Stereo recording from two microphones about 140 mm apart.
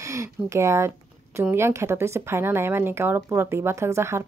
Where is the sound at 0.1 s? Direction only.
20° right (ahead or behind).